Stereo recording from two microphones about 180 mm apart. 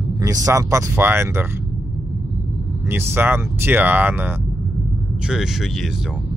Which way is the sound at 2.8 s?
10° right (ahead or behind).